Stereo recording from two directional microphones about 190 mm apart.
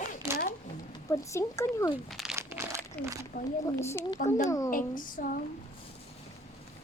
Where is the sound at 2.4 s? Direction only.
15° right (ahead or behind).